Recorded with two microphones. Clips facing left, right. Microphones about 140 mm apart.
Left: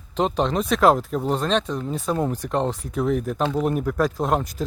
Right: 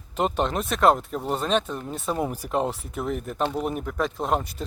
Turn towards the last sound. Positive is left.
turn(degrees=0)  # may be behind; listen again after turning